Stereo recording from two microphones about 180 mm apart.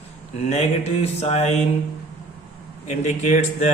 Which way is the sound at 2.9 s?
40° left (ahead or behind).